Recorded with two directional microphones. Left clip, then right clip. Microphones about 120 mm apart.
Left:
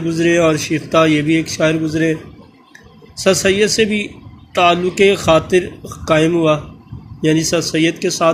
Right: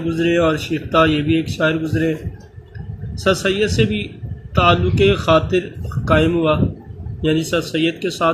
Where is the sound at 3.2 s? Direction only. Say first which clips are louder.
Left 4 dB; 30° left (ahead or behind).